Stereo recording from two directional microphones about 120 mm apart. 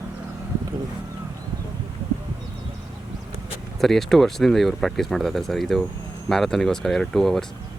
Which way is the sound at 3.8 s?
Centre (ahead or behind).